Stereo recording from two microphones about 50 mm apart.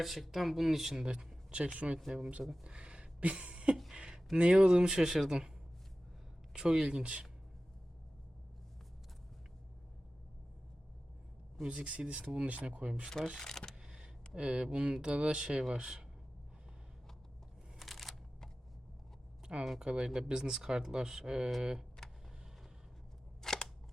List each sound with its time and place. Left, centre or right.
0.0 s speech: centre; by 2.0 s right
2.0 s speech: centre
2.6 s a sound: right
4.4 s speech: centre
6.6 s speech: centre
11.6 s speech: right
13.4 s speech: centre
13.8 s a sound: centre
14.3 s speech: right
17.7 s a sound: centre
19.8 s speech: centre
23.4 s scissors: centre